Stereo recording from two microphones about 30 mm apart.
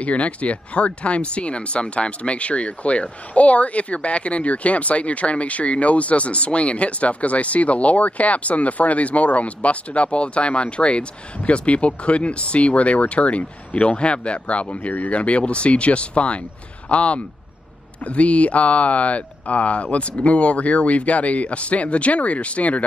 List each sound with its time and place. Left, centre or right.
0.0 s speech: left
14.9 s speech: left
15.1 s speech: left